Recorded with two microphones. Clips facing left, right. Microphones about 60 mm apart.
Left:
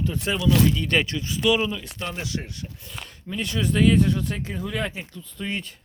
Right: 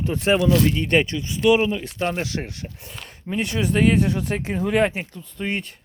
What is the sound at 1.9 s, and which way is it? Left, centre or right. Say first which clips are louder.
Speech: right 6 dB; right.